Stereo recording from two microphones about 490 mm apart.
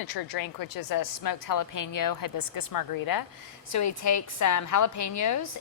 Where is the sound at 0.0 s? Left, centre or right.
Left.